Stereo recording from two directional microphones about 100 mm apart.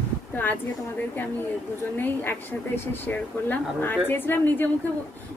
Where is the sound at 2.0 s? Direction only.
20° left (ahead or behind).